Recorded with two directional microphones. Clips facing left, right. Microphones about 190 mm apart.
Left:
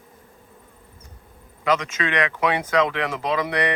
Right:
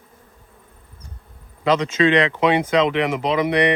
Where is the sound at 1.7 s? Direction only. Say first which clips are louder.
Right 6 dB; 30° right (ahead or behind).